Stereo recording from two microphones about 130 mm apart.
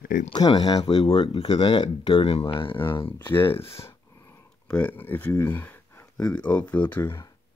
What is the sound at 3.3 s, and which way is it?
Speech, 15° left (ahead or behind).